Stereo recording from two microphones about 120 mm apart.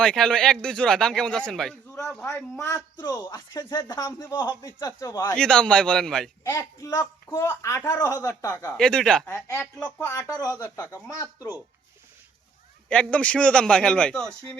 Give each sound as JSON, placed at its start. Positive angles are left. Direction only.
{"t": 0.0, "sound": "a man's voice", "side_deg": 5}
{"t": 3.0, "sound": "speech", "side_deg": 35}
{"t": 5.4, "sound": "a man's voice", "side_deg": 5}
{"t": 6.4, "sound": "speech", "side_deg": 25}
{"t": 8.7, "sound": "a man's voice", "side_deg": 5}
{"t": 9.3, "sound": "speech", "side_deg": 20}
{"t": 12.9, "sound": "a man's voice", "side_deg": 10}